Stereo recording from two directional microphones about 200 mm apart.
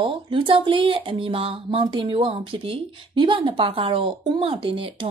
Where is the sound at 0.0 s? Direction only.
25° right (ahead or behind).